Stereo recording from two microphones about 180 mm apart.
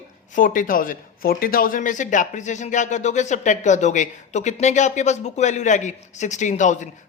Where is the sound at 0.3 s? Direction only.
45° left (ahead or behind).